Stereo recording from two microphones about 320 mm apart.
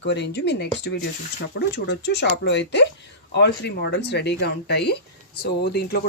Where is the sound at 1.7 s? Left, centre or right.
Left.